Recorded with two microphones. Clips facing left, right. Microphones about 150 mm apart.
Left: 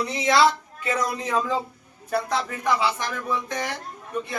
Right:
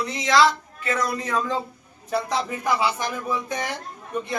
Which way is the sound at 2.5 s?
15° right (ahead or behind).